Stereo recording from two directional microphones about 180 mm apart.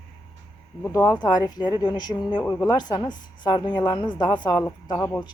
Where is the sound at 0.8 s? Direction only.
15° left (ahead or behind).